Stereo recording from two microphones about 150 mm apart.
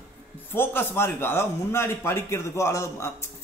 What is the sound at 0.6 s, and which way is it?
A man's voice, 15° left (ahead or behind).